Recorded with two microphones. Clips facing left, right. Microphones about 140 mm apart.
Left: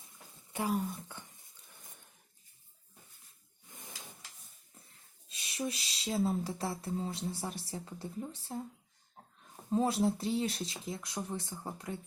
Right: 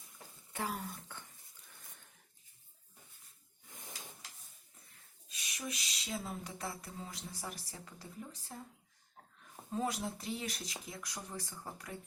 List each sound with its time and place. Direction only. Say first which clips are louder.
0.5 s speech: left 7 dB; 15° left (ahead or behind)
5.3 s speech: left 6 dB; 30° left (ahead or behind)
9.7 s speech: left 8 dB; 30° left (ahead or behind)